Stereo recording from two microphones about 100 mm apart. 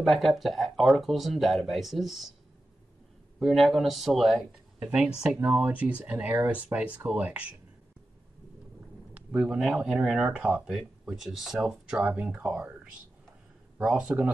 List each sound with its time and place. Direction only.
0.0 s speech: centre (ahead or behind)
3.3 s speech: centre (ahead or behind)
9.1 s speech: 10° right (ahead or behind)
13.7 s speech: 10° right (ahead or behind)